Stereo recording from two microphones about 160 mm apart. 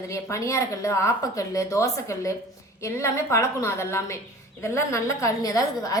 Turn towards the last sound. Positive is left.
turn(degrees=25)  # may be behind; listen again after turning